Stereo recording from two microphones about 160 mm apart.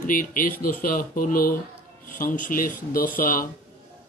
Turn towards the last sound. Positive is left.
turn(degrees=60)  # may be behind; listen again after turning